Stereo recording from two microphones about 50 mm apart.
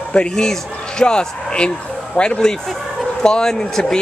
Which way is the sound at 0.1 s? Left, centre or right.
Centre.